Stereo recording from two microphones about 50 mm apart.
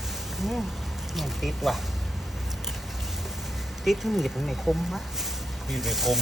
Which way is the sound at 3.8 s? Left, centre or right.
Centre.